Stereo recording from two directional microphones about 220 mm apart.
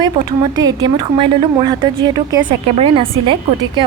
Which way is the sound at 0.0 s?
20° right (ahead or behind).